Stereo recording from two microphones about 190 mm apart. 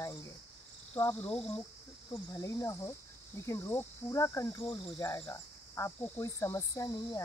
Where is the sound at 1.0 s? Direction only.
20° left (ahead or behind).